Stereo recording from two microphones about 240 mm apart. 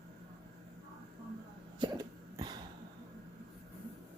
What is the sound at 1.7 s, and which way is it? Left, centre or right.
Cough, centre.